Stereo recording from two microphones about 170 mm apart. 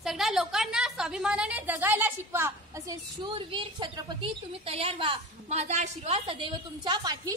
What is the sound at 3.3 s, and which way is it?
A woman's voice, 30° right (ahead or behind).